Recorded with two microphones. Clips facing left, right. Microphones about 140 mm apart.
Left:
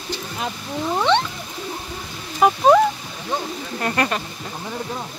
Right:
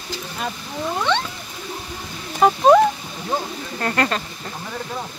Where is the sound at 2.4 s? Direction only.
Centre (ahead or behind).